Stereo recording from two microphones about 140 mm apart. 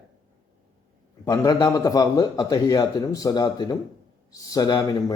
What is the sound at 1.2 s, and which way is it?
A man's voice, 25° left (ahead or behind).